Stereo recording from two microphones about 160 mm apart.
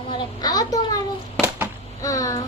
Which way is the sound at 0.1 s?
25° left (ahead or behind).